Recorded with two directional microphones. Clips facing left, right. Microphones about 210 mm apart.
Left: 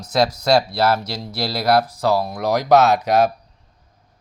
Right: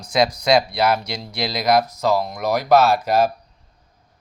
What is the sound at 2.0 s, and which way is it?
Speech, 10° left (ahead or behind).